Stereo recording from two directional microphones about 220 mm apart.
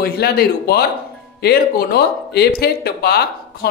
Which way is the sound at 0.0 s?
45° left (ahead or behind).